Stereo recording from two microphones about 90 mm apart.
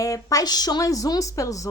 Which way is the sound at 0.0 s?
40° left (ahead or behind).